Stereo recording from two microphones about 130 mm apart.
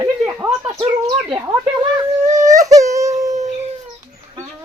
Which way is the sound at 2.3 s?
75° right (ahead or behind).